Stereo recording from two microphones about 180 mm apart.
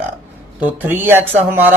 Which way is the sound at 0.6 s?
10° right (ahead or behind).